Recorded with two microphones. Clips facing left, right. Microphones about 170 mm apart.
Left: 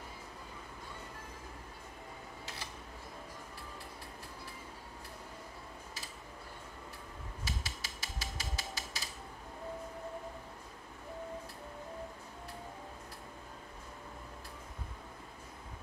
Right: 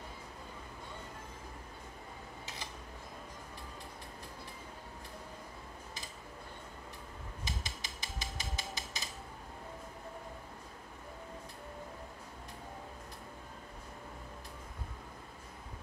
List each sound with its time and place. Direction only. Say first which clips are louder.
7.4 s hammer: left 1 dB; 15° right (ahead or behind)